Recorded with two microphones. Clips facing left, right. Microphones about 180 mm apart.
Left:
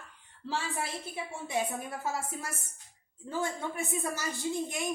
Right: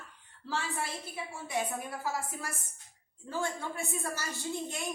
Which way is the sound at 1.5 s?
25° left (ahead or behind).